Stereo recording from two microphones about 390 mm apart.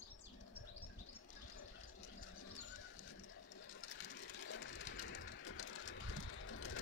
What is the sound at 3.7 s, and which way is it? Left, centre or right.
Sewing machine, left.